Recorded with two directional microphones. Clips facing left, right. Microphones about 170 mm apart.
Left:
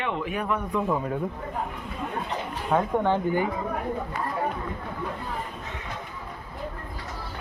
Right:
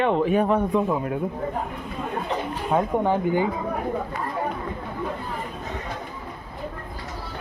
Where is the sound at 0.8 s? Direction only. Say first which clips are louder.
Right 2 dB; 5° right (ahead or behind).